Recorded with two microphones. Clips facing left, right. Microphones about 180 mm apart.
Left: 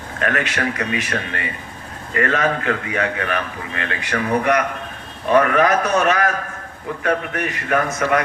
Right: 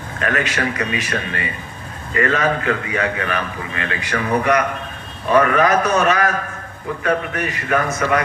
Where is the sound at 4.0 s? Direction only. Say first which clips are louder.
Even; 55° left (ahead or behind).